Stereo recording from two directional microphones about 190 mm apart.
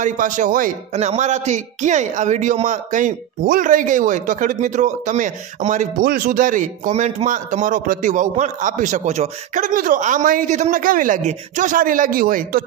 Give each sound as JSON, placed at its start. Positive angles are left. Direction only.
{"t": 0.0, "sound": "a man's voice", "side_deg": -45}